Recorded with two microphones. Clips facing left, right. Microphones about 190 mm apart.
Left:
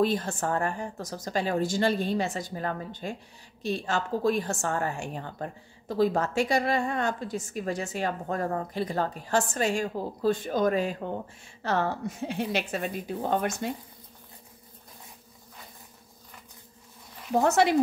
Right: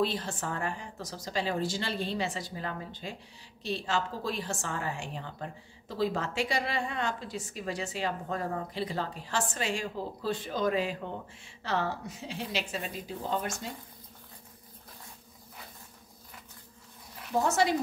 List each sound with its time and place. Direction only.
0.0 s a woman's voice: 45° left (ahead or behind)
17.4 s a woman's voice: 65° left (ahead or behind)